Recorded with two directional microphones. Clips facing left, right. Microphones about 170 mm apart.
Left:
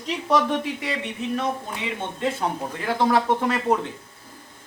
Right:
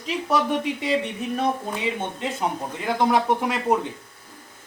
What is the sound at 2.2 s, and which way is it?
Speech, 15° right (ahead or behind).